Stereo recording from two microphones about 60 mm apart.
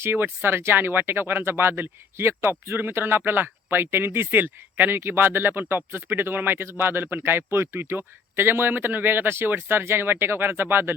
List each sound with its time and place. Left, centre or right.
0.0 s speech: right